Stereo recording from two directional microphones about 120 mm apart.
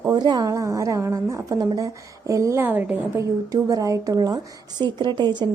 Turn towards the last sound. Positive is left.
turn(degrees=-40)  # may be behind; listen again after turning